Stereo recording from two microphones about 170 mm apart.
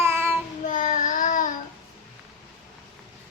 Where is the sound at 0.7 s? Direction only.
50° left (ahead or behind).